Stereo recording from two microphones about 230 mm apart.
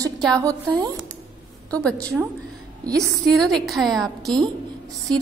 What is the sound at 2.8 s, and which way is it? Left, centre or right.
Speech, centre.